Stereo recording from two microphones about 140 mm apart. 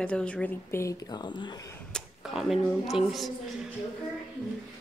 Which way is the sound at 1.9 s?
5° left (ahead or behind).